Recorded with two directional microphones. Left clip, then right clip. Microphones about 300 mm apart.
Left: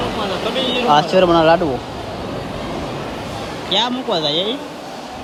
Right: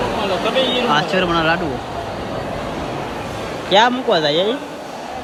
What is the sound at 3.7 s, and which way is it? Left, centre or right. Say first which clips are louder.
Speech: right 5 dB; centre.